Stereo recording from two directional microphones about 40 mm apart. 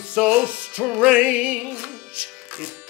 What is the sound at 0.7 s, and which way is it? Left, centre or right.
Music, right.